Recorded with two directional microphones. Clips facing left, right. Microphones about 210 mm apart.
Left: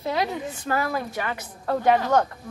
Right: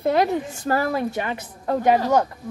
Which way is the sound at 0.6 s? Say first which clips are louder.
Right 3 dB; 40° right (ahead or behind).